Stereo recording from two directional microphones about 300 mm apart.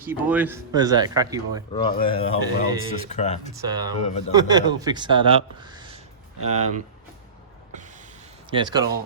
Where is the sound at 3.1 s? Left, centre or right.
Left.